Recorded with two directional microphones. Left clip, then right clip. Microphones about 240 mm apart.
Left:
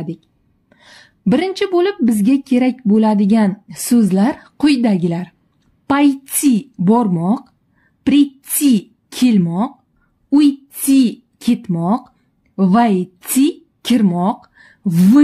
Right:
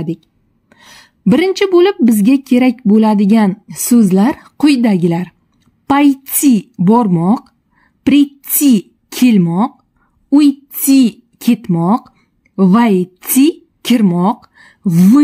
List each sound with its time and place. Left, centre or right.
0.0 s a woman's voice: right